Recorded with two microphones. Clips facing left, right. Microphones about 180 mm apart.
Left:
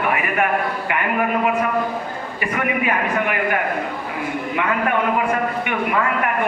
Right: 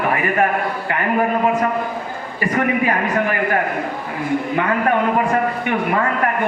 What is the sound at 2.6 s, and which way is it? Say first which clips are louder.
A man's voice: right 3 dB; 35° right (ahead or behind).